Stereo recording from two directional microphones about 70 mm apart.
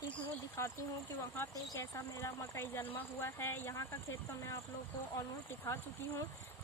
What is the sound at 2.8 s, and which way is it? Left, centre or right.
Speech, left.